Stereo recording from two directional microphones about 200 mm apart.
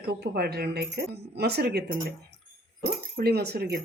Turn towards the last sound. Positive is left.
turn(degrees=-55)  # may be behind; listen again after turning